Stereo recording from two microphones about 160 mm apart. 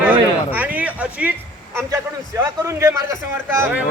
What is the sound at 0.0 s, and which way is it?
A man's voice, 10° right (ahead or behind).